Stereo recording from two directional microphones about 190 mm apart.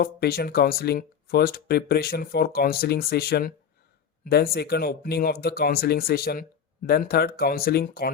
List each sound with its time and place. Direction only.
0.0 s speech: 55° left (ahead or behind)